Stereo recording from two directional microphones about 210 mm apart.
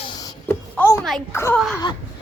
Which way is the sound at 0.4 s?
15° left (ahead or behind).